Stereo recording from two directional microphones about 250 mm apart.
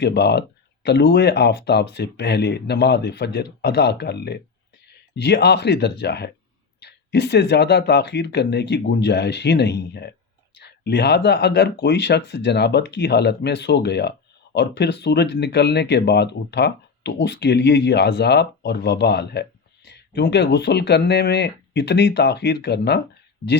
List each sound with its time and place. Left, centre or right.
0.0 s speech: left